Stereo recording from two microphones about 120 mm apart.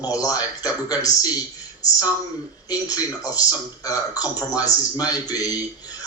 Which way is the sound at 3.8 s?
30° left (ahead or behind).